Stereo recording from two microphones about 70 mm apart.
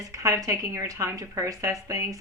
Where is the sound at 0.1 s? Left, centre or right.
Right.